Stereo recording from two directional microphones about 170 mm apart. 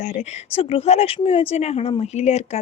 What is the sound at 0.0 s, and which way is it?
Speech, 45° left (ahead or behind).